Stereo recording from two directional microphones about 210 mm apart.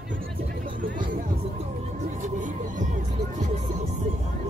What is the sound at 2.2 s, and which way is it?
Music, 35° right (ahead or behind).